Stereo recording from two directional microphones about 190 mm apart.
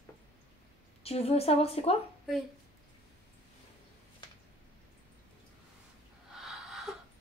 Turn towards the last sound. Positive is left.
turn(degrees=0)  # may be behind; listen again after turning